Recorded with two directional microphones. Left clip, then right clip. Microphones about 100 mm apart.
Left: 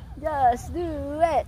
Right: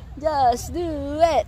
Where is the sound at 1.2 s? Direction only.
50° right (ahead or behind).